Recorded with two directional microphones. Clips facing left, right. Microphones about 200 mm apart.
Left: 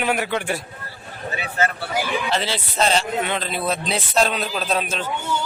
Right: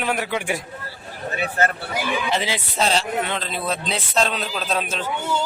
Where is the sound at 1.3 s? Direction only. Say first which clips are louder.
Right 1 dB; 50° right (ahead or behind).